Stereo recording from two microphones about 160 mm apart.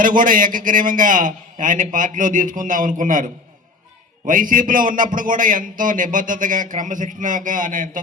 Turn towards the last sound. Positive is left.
turn(degrees=-55)  # may be behind; listen again after turning